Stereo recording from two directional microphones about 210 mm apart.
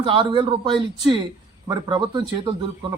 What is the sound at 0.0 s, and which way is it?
Speech, 25° right (ahead or behind).